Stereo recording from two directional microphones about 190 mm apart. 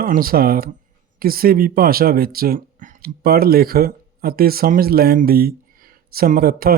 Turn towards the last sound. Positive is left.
turn(degrees=-50)  # may be behind; listen again after turning